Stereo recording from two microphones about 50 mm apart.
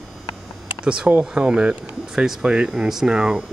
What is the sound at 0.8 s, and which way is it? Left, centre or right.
Speech, centre.